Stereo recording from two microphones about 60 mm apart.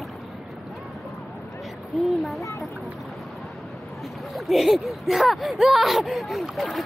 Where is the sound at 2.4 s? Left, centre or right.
Left.